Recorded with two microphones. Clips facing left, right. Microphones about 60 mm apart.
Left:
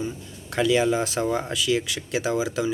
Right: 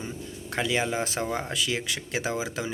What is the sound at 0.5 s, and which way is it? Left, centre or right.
Speech, right.